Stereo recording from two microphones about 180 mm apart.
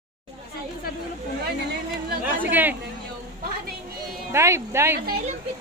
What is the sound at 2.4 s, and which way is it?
Speech, 10° right (ahead or behind).